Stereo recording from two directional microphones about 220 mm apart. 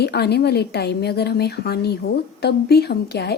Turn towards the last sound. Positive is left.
turn(degrees=45)  # may be behind; listen again after turning